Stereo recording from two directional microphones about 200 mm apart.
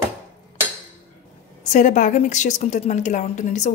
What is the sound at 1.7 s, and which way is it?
A woman's voice, 40° left (ahead or behind).